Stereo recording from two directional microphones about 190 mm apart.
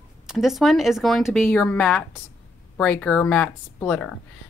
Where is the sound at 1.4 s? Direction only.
10° left (ahead or behind).